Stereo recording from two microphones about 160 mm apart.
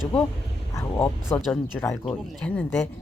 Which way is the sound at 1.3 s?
10° left (ahead or behind).